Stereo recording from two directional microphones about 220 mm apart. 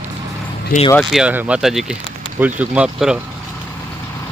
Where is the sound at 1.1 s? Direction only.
5° right (ahead or behind).